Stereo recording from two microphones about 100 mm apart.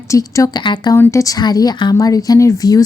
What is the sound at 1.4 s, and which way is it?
Speech, 40° left (ahead or behind).